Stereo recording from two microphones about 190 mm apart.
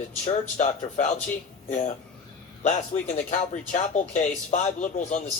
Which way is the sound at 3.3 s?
40° left (ahead or behind).